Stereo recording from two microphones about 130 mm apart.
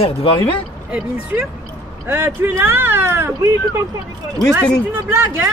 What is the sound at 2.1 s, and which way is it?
Speech, 15° right (ahead or behind).